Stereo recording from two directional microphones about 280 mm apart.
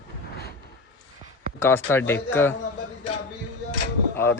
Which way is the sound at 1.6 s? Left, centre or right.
Centre.